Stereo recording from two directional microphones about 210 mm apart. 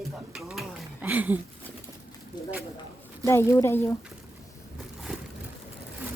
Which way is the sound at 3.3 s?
15° left (ahead or behind).